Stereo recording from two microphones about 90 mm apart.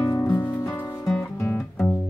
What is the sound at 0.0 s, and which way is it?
Music, 45° left (ahead or behind).